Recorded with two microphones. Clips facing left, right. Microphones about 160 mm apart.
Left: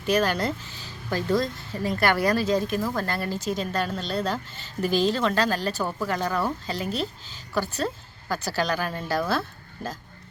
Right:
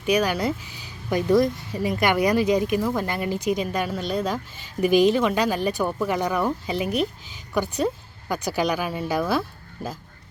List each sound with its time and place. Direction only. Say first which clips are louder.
0.0 s speech: right 2 dB; 10° right (ahead or behind)